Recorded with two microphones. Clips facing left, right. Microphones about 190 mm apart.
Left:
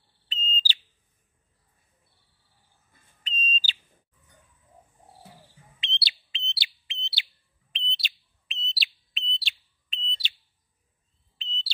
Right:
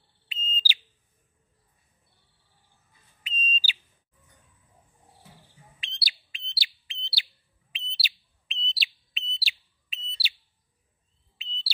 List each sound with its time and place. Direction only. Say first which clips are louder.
0.3 s smoke detector: left 2 dB; 10° right (ahead or behind)
3.3 s bird: left 1 dB; 10° right (ahead or behind)
5.8 s bird: left 5 dB; 25° left (ahead or behind)
7.7 s bird: left 3 dB; 5° right (ahead or behind)